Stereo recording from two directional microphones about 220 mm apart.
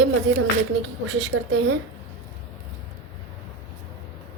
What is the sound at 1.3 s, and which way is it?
Speech, 60° right (ahead or behind).